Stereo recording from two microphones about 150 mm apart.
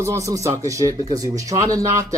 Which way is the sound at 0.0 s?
20° right (ahead or behind).